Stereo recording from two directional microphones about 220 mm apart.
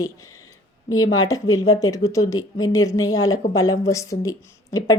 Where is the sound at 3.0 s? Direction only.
65° left (ahead or behind).